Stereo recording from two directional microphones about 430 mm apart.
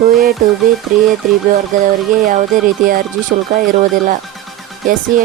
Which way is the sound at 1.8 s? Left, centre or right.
Centre.